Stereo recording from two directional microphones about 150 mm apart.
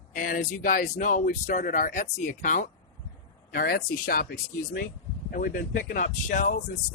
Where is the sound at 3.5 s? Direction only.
80° left.